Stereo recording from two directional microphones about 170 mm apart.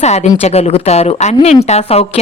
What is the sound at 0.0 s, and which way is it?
A woman's voice, 40° left (ahead or behind).